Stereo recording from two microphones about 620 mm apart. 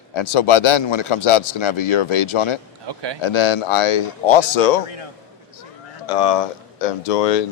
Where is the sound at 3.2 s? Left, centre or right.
Left.